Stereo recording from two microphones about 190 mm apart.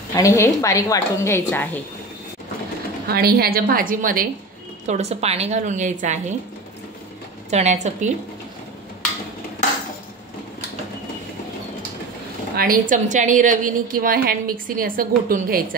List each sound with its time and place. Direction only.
0.1 s a woman's voice: 15° left (ahead or behind)
3.1 s a woman's voice: 55° right (ahead or behind)
4.8 s a woman's voice: 35° right (ahead or behind)
7.5 s a woman's voice: 35° right (ahead or behind)
12.5 s a woman's voice: 50° right (ahead or behind)